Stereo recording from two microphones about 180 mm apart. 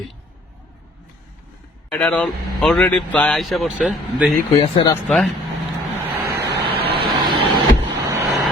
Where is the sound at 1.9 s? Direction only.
5° left (ahead or behind).